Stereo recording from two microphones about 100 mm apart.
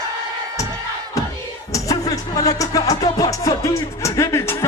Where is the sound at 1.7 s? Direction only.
35° left (ahead or behind).